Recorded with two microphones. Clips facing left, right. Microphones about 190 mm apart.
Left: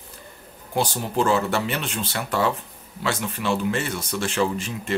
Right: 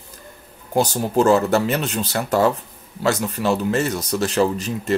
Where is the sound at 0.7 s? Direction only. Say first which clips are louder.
Right 5 dB; 45° right (ahead or behind).